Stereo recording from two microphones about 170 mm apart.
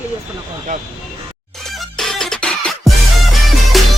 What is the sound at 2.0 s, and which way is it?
Music, 5° left (ahead or behind).